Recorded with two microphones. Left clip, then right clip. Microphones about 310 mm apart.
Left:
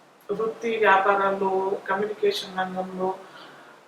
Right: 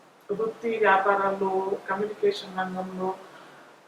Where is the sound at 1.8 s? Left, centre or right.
Centre.